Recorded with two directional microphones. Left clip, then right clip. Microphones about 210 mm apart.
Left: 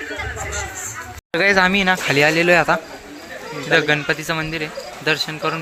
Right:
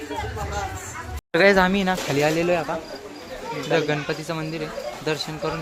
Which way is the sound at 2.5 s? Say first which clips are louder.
Left 10 dB; 20° left (ahead or behind).